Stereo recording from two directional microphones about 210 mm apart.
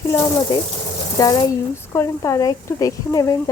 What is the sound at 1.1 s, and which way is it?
Speech, 15° left (ahead or behind).